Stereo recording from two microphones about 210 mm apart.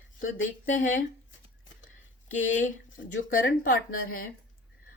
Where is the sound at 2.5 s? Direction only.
40° left (ahead or behind).